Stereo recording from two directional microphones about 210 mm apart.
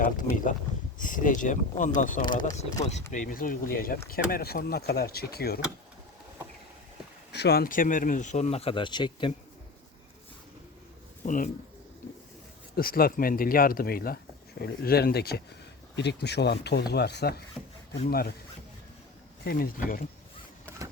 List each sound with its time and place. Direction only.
0.0 s speech: 40° left (ahead or behind)
7.3 s speech: 50° left (ahead or behind); by 9.3 s 20° left (ahead or behind)
11.2 s speech: 40° left (ahead or behind)
12.7 s speech: 45° left (ahead or behind)
19.5 s speech: 45° left (ahead or behind)